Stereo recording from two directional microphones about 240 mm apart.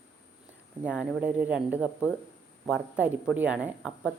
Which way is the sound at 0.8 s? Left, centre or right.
Centre.